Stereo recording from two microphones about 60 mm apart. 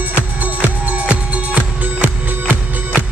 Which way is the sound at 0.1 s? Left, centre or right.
Right.